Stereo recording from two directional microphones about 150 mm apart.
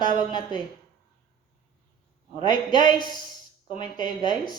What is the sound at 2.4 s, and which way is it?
Speech, 30° left (ahead or behind).